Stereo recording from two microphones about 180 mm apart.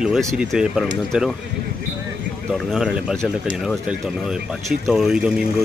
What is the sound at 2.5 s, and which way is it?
Speech, centre (ahead or behind).